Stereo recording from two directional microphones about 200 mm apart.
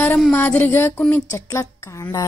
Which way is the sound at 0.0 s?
10° left (ahead or behind).